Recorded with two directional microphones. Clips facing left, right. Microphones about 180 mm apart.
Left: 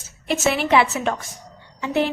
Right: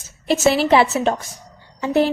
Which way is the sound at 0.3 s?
35° right (ahead or behind).